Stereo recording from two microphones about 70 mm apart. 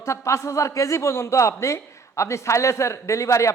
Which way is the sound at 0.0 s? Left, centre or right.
Left.